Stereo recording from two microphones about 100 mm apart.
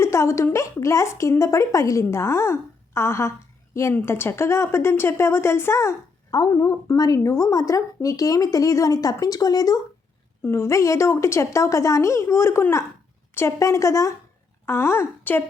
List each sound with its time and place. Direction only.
0.0 s a sound: 30° left (ahead or behind)
0.5 s speech: 30° left (ahead or behind)
6.3 s speech: 35° left (ahead or behind)
10.4 s speech: 25° left (ahead or behind)